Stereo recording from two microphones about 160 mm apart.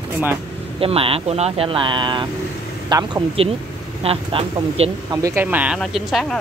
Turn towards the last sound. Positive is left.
turn(degrees=0)  # may be behind; listen again after turning